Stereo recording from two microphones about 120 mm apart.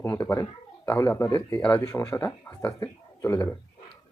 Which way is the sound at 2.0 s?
25° left (ahead or behind).